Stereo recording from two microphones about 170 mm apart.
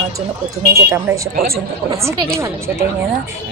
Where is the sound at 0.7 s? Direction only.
20° right (ahead or behind).